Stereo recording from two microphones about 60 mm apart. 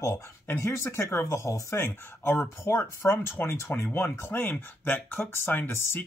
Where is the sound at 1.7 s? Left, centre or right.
Left.